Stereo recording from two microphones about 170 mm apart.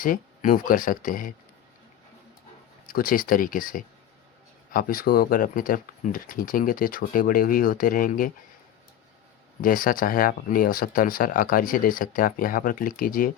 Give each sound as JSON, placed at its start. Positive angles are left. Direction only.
{"t": 0.0, "sound": "speech", "side_deg": 55}
{"t": 2.8, "sound": "speech", "side_deg": 55}
{"t": 9.6, "sound": "speech", "side_deg": 55}